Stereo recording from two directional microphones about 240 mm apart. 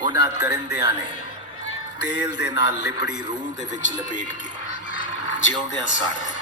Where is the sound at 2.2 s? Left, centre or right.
Centre.